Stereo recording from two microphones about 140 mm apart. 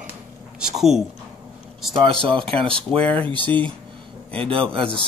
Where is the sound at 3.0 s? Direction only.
10° left (ahead or behind).